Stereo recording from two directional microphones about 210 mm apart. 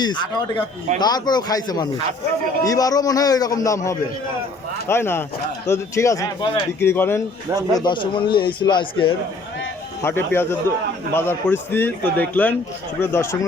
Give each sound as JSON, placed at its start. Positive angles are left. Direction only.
{"t": 0.0, "sound": "a man's voice", "side_deg": 20}
{"t": 7.9, "sound": "a man's voice", "side_deg": 20}
{"t": 10.0, "sound": "speech", "side_deg": 10}